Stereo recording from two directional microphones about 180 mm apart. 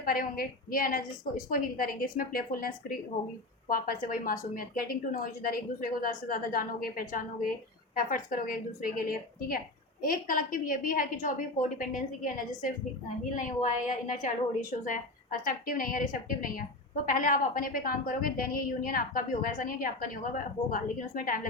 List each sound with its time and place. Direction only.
0.0 s a woman's voice: 55° left (ahead or behind)
4.0 s a woman's voice: 50° left (ahead or behind)